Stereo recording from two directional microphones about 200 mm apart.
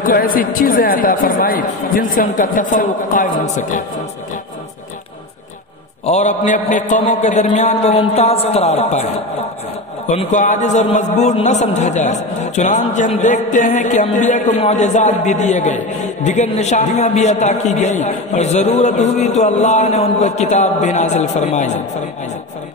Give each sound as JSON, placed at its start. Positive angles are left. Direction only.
{"t": 0.0, "sound": "speech", "side_deg": 45}
{"t": 6.0, "sound": "a man's voice", "side_deg": 35}